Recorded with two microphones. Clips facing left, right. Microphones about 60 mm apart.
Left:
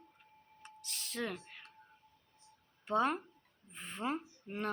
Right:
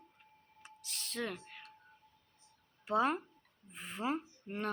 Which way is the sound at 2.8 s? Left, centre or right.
Centre.